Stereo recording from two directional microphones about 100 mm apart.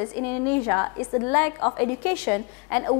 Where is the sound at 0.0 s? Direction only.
15° left (ahead or behind).